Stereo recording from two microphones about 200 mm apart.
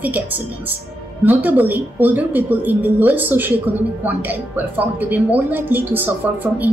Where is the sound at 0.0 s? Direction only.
10° right (ahead or behind).